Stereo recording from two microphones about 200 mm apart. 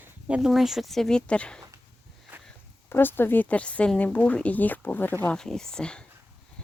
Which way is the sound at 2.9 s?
10° left (ahead or behind).